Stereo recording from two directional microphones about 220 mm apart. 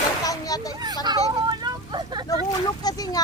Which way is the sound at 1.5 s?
20° right (ahead or behind).